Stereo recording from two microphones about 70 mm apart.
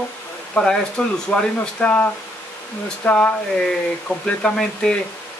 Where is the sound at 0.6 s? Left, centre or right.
Centre.